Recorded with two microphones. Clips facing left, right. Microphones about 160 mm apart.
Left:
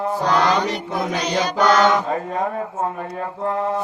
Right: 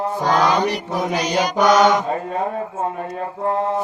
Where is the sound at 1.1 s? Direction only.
10° right (ahead or behind).